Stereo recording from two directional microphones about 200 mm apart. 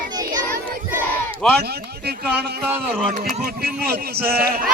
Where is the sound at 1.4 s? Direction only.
Centre (ahead or behind).